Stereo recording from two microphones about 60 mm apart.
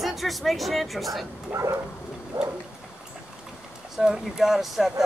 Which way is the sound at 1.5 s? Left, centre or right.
Right.